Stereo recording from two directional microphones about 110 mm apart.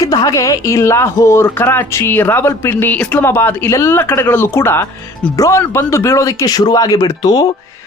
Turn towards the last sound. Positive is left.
turn(degrees=35)  # may be behind; listen again after turning